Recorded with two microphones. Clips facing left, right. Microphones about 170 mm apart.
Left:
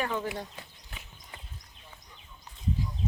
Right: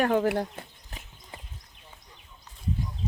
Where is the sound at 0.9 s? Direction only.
40° right (ahead or behind).